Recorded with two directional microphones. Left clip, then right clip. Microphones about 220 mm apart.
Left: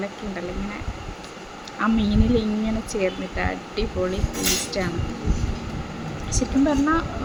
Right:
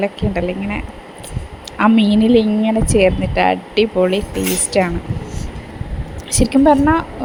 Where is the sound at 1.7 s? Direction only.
30° right (ahead or behind).